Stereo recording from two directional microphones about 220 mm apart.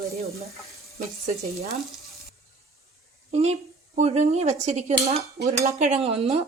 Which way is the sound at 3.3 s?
30° right (ahead or behind).